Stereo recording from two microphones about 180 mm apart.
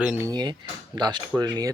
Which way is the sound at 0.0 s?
10° right (ahead or behind).